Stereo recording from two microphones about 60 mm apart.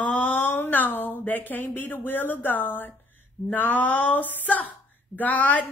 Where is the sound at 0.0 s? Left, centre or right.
Left.